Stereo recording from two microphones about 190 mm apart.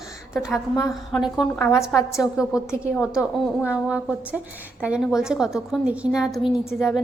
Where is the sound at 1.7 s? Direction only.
15° left (ahead or behind).